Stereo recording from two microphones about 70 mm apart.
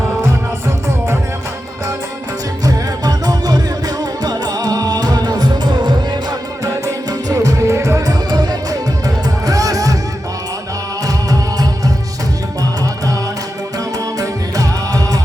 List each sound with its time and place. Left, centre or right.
2.6 s music: right
6.8 s music: right
8.3 s music: right
11.0 s music: right
14.2 s music: right